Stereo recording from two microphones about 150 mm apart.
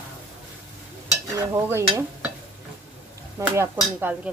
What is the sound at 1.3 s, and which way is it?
Dishes, 20° right (ahead or behind).